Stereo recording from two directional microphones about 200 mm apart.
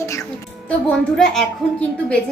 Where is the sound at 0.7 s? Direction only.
5° left (ahead or behind).